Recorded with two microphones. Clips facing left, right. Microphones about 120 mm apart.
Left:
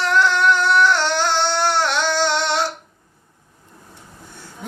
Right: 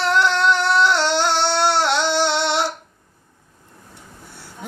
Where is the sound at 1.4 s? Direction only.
15° right (ahead or behind).